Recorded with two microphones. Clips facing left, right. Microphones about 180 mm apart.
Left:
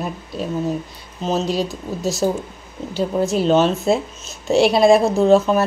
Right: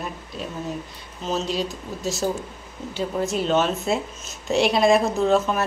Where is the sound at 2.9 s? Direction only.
35° left (ahead or behind).